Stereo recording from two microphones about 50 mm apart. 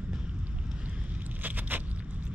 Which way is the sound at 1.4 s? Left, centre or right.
Right.